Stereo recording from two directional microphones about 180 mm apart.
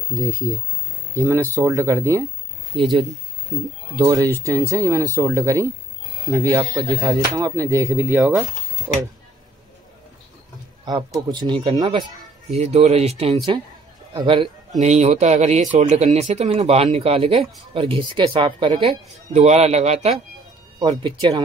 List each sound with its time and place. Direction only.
0.2 s speech: 15° right (ahead or behind)
2.7 s speech: centre (ahead or behind)
4.0 s speech: 20° right (ahead or behind)
10.9 s speech: 20° right (ahead or behind)
12.5 s speech: 35° right (ahead or behind)
13.5 s speech: 25° right (ahead or behind)
14.8 s speech: 40° right (ahead or behind)
20.8 s speech: 25° right (ahead or behind)